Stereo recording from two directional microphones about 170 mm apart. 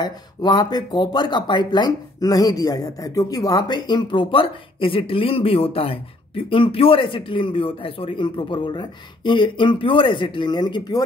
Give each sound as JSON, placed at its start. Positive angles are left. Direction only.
{"t": 0.0, "sound": "speech", "side_deg": 25}